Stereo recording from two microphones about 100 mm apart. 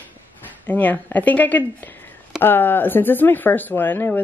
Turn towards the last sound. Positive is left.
turn(degrees=20)  # may be behind; listen again after turning